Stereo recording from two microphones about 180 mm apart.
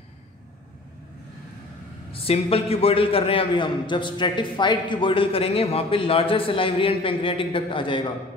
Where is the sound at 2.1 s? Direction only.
35° left (ahead or behind).